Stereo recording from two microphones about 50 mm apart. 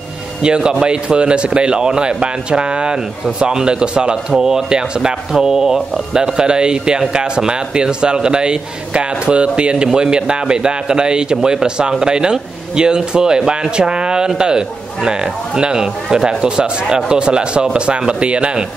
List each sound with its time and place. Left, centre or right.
0.4 s speech: centre
4.3 s speech: centre